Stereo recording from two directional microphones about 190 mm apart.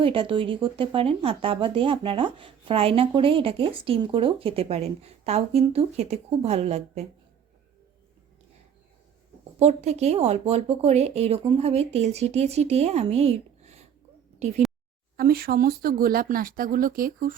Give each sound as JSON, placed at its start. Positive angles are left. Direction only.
{"t": 0.0, "sound": "speech", "side_deg": -30}
{"t": 9.6, "sound": "speech", "side_deg": -35}
{"t": 15.1, "sound": "speech", "side_deg": -50}